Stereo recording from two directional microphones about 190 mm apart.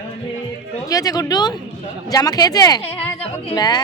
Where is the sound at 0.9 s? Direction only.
20° left (ahead or behind).